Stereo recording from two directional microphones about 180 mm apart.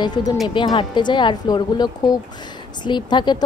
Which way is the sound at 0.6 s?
25° left (ahead or behind).